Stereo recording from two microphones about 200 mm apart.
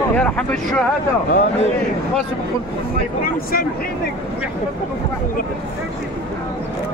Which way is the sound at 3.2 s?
45° left (ahead or behind).